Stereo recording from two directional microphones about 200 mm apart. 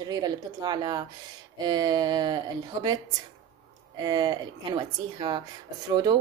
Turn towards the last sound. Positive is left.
turn(degrees=-20)  # may be behind; listen again after turning